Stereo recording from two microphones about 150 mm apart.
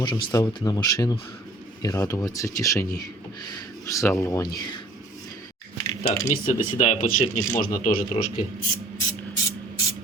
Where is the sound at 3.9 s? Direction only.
20° left (ahead or behind).